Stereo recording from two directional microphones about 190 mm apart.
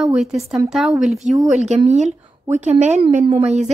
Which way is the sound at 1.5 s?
35° right (ahead or behind).